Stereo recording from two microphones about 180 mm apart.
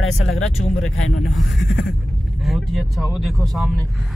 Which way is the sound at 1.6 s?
90° left.